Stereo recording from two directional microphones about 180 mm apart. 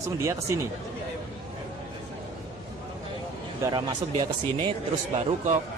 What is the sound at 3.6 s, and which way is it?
Speech, 20° right (ahead or behind).